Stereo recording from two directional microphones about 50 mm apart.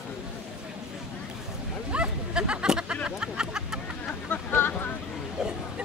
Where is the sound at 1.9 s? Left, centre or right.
Right.